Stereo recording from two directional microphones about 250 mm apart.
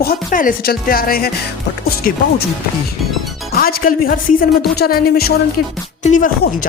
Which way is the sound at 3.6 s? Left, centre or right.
Left.